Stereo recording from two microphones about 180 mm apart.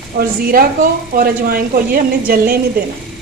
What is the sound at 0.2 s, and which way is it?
Speech, 50° right (ahead or behind).